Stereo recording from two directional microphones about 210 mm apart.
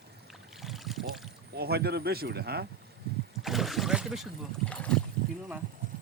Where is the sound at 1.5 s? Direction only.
50° right (ahead or behind).